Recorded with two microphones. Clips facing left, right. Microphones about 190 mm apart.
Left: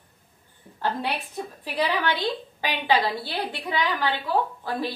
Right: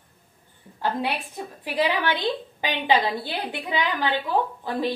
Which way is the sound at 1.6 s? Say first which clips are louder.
Right 2 dB; 15° right (ahead or behind).